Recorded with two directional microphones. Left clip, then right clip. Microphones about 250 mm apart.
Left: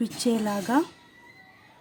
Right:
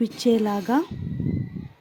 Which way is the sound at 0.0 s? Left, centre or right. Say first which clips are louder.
Right 5 dB; right.